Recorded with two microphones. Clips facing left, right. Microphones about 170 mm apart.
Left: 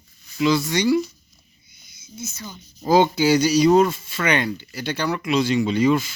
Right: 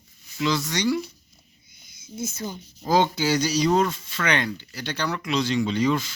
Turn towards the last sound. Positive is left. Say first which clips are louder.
# left 4 dB
turn(degrees=10)  # may be behind; listen again after turning